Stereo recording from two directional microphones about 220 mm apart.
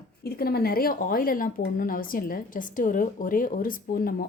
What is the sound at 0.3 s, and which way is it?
A woman's voice, 45° left (ahead or behind).